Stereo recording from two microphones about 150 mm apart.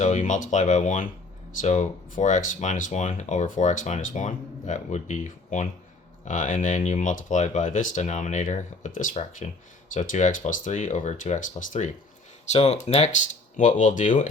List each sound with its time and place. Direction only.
0.0 s speech: 55° left (ahead or behind)
13.6 s speech: 60° left (ahead or behind)